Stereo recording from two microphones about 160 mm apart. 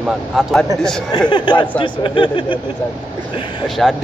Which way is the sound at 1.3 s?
30° left (ahead or behind).